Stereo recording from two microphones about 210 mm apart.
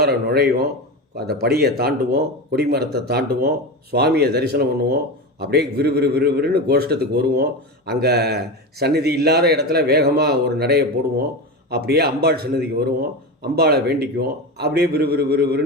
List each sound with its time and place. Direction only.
0.0 s a man's voice: 50° right (ahead or behind)